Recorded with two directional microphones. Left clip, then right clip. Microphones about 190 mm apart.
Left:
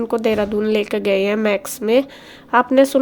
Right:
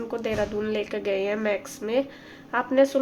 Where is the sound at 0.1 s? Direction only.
40° left (ahead or behind).